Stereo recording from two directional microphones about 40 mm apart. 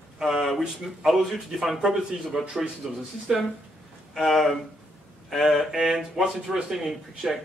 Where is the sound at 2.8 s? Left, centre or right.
Centre.